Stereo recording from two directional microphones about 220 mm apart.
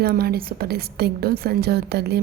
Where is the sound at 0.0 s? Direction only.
45° right (ahead or behind).